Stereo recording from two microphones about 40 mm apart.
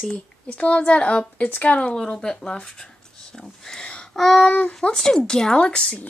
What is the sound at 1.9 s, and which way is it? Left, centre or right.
Speech, centre.